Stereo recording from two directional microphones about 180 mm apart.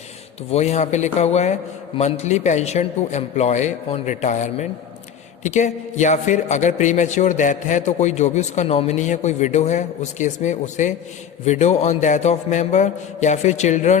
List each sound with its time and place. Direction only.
0.5 s a man's voice: 40° left (ahead or behind)